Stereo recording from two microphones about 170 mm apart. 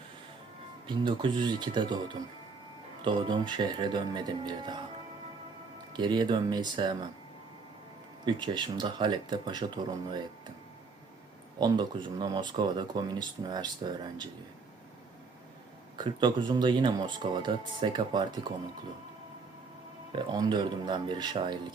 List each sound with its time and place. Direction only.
0.9 s speech: 30° right (ahead or behind)
3.0 s speech: 30° right (ahead or behind)
5.9 s speech: 25° right (ahead or behind)
8.2 s speech: 25° right (ahead or behind)
11.6 s speech: 25° right (ahead or behind)
16.0 s speech: 25° right (ahead or behind)
20.1 s speech: 25° right (ahead or behind)